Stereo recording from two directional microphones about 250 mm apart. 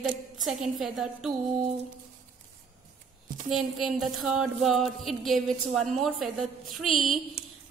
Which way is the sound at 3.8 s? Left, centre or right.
Centre.